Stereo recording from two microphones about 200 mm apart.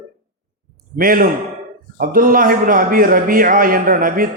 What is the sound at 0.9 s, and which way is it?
Speech, 45° right (ahead or behind).